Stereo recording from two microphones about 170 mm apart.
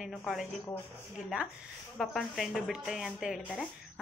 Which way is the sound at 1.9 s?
Centre (ahead or behind).